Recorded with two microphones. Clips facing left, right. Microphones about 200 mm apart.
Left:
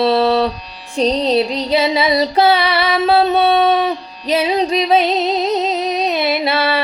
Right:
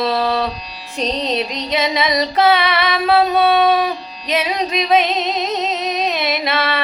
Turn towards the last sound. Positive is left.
turn(degrees=30)  # may be behind; listen again after turning